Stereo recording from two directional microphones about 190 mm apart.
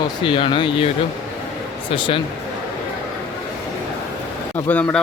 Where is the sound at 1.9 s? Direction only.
25° left (ahead or behind).